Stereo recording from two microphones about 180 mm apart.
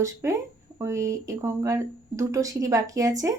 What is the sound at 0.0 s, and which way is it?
Speech, 15° right (ahead or behind).